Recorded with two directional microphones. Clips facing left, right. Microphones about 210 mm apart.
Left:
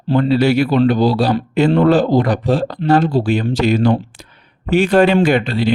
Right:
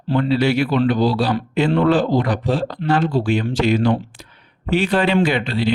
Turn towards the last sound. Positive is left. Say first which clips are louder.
# left 4 dB
turn(degrees=45)  # may be behind; listen again after turning